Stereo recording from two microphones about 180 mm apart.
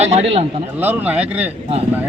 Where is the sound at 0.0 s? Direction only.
35° right (ahead or behind).